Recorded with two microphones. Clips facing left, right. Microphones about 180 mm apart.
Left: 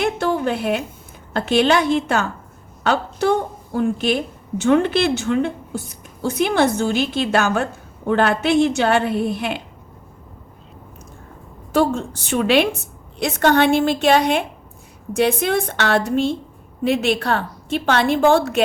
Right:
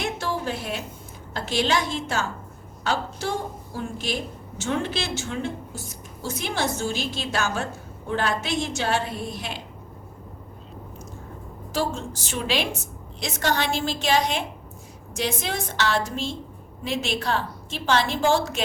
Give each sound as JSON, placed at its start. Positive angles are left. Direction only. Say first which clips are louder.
{"t": 0.0, "sound": "a sound", "louder": "left 8 dB", "side_deg": 60}
{"t": 1.3, "sound": "a woman's voice", "louder": "left 8 dB", "side_deg": 60}
{"t": 11.7, "sound": "a woman's voice", "louder": "left 9 dB", "side_deg": 60}